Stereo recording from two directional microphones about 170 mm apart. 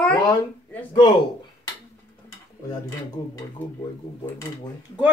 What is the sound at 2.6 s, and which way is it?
Dishes, 25° left (ahead or behind).